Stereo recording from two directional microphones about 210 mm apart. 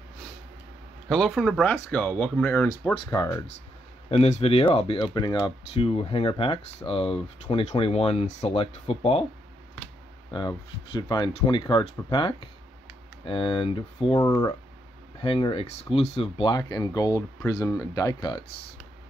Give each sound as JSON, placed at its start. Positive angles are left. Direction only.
{"t": 1.0, "sound": "speech", "side_deg": 0}
{"t": 4.1, "sound": "speech", "side_deg": 30}
{"t": 10.3, "sound": "speech", "side_deg": 20}